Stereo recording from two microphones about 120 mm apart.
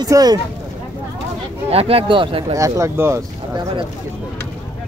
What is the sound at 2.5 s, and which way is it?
Speech, 25° right (ahead or behind).